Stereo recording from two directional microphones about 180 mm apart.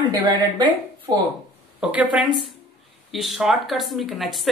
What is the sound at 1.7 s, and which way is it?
Speech, centre (ahead or behind).